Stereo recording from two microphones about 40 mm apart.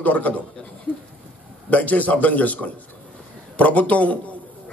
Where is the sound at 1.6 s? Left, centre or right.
Left.